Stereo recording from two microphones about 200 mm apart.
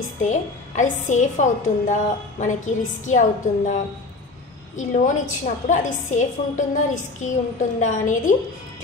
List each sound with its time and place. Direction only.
0.2 s a woman's voice: 40° left (ahead or behind)
4.7 s a woman's voice: 40° left (ahead or behind)